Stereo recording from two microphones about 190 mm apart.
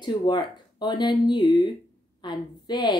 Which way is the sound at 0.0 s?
25° left (ahead or behind).